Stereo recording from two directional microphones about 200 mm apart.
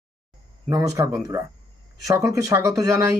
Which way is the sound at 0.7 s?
15° right (ahead or behind).